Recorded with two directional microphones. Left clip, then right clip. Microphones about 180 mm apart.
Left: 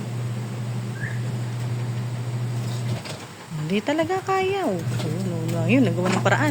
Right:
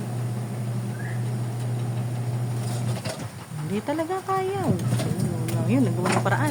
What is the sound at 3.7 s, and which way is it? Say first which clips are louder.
Speech: left 4 dB; 20° left (ahead or behind).